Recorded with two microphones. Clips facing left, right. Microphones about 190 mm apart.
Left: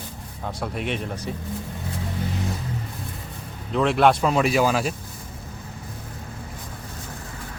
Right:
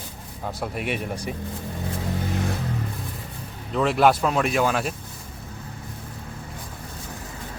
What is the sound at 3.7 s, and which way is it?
Speech, centre (ahead or behind).